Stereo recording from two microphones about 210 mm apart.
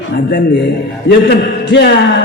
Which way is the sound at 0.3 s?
55° left (ahead or behind).